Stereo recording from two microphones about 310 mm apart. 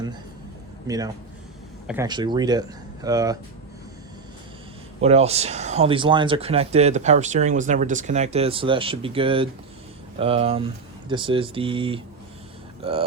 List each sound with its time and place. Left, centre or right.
0.9 s speech: centre
4.9 s speech: centre